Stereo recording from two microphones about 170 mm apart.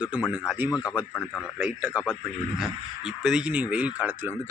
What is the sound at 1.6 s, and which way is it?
Speech, 5° right (ahead or behind).